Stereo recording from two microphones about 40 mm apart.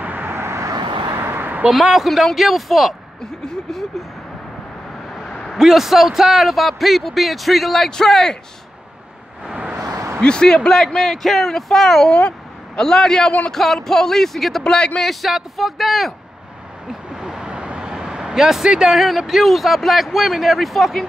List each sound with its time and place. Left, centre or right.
0.0 s vehicle: right
0.3 s vehicle: right
1.2 s a sound: right
1.7 s speech: centre
5.6 s speech: centre
10.2 s a man's voice: left
12.1 s a man's voice: left
12.7 s a man's voice: centre
14.6 s a man's voice: centre
15.0 s speech: centre
17.1 s vehicle: centre
17.6 s speech: right; by 21.1 s centre